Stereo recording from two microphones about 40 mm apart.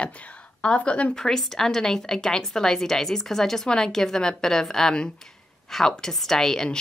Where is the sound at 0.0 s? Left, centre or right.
Left.